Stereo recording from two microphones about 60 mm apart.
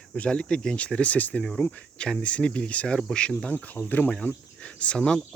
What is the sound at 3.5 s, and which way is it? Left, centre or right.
Speech, left.